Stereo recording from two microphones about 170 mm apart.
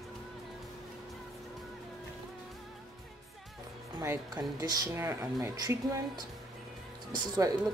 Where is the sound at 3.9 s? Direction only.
20° right (ahead or behind).